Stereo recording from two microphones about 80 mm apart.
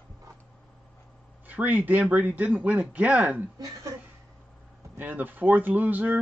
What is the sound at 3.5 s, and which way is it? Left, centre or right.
Speech, right.